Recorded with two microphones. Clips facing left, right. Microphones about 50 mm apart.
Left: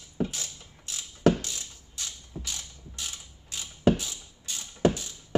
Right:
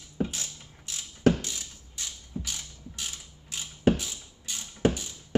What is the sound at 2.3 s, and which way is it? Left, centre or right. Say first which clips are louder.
Mechanisms: right 3 dB; centre.